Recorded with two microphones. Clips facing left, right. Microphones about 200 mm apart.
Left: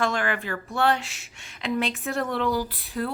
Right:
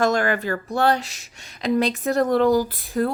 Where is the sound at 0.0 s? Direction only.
40° right (ahead or behind).